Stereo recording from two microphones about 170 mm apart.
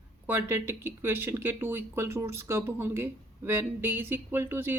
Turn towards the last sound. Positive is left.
turn(degrees=-15)  # may be behind; listen again after turning